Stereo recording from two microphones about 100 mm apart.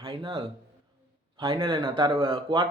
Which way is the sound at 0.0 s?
60° right (ahead or behind).